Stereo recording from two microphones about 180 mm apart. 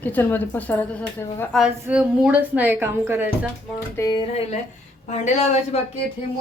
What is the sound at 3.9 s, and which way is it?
Speech, 20° left (ahead or behind).